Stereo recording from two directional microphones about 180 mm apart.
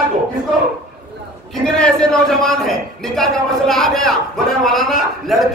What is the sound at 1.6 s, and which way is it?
A man's voice, 5° left (ahead or behind).